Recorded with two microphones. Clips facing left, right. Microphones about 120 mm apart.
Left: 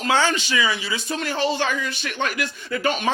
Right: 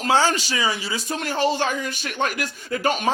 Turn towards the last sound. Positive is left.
turn(degrees=-40)  # may be behind; listen again after turning